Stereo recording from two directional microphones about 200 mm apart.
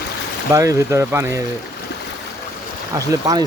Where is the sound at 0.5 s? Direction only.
15° right (ahead or behind).